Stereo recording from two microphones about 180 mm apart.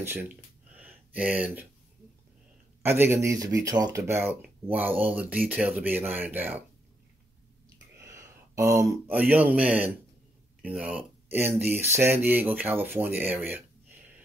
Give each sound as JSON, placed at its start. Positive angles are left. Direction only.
{"t": 0.0, "sound": "a sound", "side_deg": -10}
{"t": 2.8, "sound": "speech", "side_deg": -10}
{"t": 8.1, "sound": "speech", "side_deg": -15}